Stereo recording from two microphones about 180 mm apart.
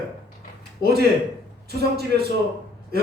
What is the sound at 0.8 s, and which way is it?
Speech, 65° right (ahead or behind).